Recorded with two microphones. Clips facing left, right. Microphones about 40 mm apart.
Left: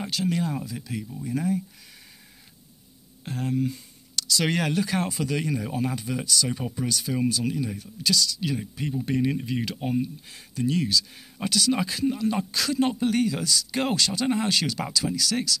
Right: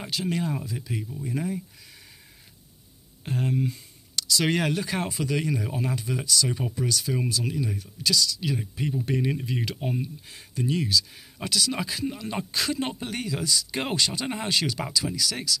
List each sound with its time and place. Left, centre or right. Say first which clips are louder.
0.0 s speech: left 2 dB; centre
1.2 s speech: left 4 dB; right
3.3 s speech: even; right
4.3 s speech: right 1 dB; centre; by 12.7 s right
13.0 s speech: left 7 dB; centre
14.2 s speech: left 3 dB; centre